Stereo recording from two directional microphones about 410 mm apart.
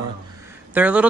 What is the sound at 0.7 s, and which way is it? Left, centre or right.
Speech, centre.